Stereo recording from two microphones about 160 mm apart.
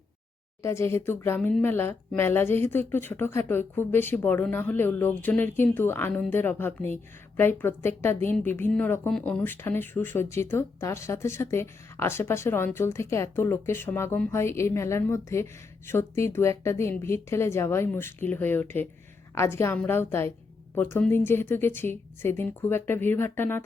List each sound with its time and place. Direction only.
0.6 s speech: 15° left (ahead or behind)